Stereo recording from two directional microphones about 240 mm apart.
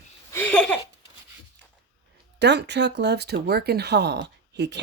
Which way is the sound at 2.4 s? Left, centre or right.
Right.